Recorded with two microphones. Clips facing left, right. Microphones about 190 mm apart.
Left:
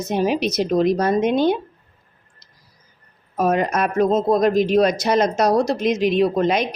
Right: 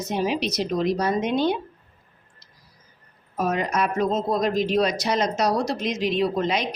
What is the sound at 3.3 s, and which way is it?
Speech, 50° left (ahead or behind).